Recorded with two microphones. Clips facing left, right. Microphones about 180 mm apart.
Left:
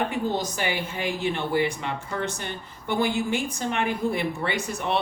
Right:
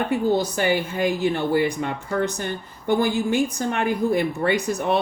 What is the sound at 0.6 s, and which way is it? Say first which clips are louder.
A woman's voice: right 7 dB; 45° right (ahead or behind).